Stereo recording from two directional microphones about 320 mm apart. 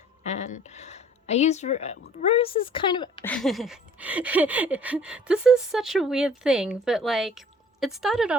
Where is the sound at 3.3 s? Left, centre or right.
Centre.